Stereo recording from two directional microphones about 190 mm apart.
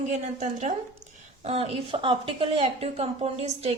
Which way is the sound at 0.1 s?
40° right (ahead or behind).